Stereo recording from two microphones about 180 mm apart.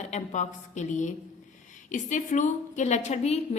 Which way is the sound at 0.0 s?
40° left (ahead or behind).